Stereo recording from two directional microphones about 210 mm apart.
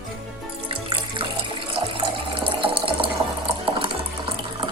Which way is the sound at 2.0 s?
25° right (ahead or behind).